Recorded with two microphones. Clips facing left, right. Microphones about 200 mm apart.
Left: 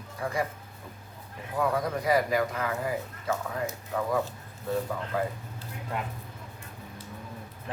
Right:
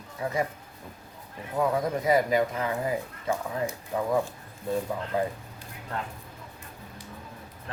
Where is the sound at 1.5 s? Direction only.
20° right (ahead or behind).